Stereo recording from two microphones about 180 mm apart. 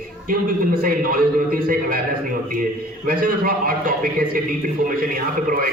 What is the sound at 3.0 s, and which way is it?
A man's voice, 50° right (ahead or behind).